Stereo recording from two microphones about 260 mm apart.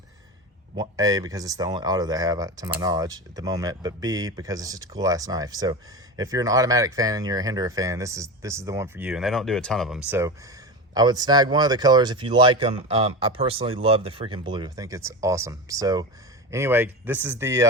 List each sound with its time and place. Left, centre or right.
0.8 s speech: centre
10.1 s speech: centre